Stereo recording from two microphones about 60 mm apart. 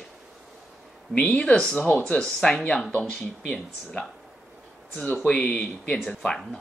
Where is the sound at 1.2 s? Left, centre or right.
Centre.